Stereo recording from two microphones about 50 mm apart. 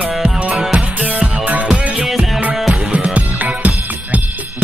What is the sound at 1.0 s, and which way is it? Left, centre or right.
Music, right.